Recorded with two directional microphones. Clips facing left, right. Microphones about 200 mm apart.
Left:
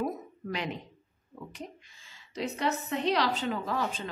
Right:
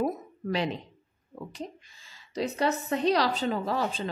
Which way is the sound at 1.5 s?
35° right (ahead or behind).